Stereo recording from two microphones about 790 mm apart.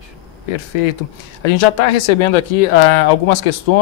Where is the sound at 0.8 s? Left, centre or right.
Left.